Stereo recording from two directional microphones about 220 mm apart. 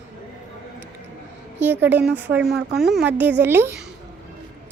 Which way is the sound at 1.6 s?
10° right (ahead or behind).